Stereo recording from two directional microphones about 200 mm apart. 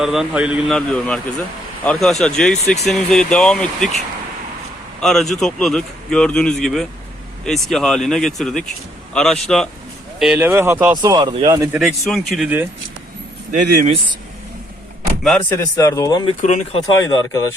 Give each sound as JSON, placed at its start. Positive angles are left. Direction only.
{"t": 0.0, "sound": "a man's voice", "side_deg": 0}
{"t": 4.9, "sound": "a man's voice", "side_deg": 0}
{"t": 10.9, "sound": "speech", "side_deg": -20}
{"t": 11.8, "sound": "a man's voice", "side_deg": 0}
{"t": 13.5, "sound": "speech", "side_deg": -40}
{"t": 15.2, "sound": "speech", "side_deg": 5}
{"t": 16.4, "sound": "speech", "side_deg": 35}
{"t": 16.8, "sound": "speech", "side_deg": 20}